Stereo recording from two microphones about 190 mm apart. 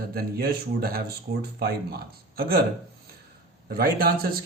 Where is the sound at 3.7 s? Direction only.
50° right (ahead or behind).